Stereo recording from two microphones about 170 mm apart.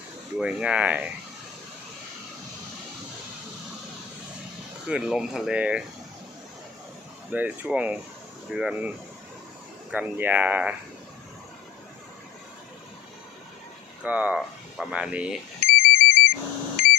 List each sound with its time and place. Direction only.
0.3 s speech: 5° right (ahead or behind)
4.9 s speech: 5° right (ahead or behind)
7.3 s speech: 10° right (ahead or behind)
9.9 s speech: 10° right (ahead or behind)
14.0 s speech: 10° right (ahead or behind)
15.6 s ringtone: 60° left (ahead or behind)
16.7 s a sound: 60° left (ahead or behind)